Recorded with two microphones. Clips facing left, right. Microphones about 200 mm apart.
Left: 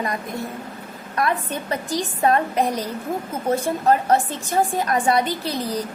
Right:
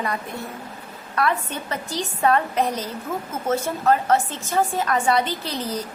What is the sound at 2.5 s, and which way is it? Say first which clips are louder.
A woman's voice: left 2 dB; 10° left (ahead or behind).